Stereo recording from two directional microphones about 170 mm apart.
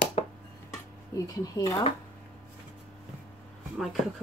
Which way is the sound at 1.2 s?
20° left (ahead or behind).